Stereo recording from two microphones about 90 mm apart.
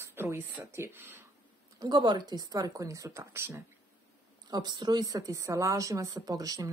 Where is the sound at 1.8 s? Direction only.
55° right (ahead or behind); by 3.6 s 30° right (ahead or behind).